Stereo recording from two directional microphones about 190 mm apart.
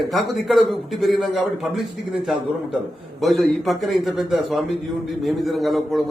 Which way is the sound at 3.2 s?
Centre (ahead or behind).